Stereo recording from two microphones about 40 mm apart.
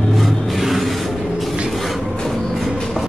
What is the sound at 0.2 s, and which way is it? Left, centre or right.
Music, centre.